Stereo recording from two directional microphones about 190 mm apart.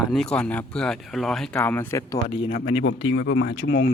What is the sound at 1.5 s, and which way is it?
Speech, 10° left (ahead or behind).